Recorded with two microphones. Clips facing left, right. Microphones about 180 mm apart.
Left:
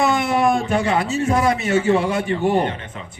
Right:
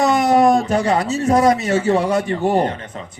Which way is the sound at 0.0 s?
40° right (ahead or behind).